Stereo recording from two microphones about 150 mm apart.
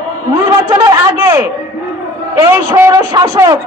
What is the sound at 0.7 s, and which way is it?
Speech, 25° right (ahead or behind).